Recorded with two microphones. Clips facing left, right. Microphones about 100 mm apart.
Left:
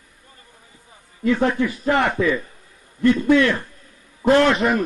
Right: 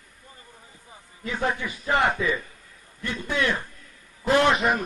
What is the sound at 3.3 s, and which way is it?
A man's voice, 15° right (ahead or behind).